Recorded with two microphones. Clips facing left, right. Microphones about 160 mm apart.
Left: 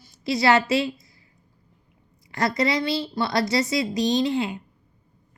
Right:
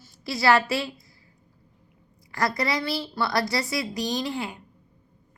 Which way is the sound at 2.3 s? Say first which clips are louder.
Left 3 dB; 20° left (ahead or behind).